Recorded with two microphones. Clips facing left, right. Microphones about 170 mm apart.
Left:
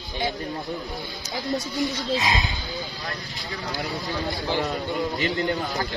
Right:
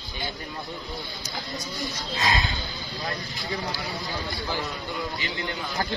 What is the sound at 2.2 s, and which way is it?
Speech, 15° left (ahead or behind).